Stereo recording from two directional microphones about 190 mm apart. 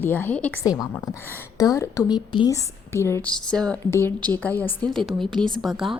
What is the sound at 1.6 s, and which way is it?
A woman's voice, 15° left (ahead or behind).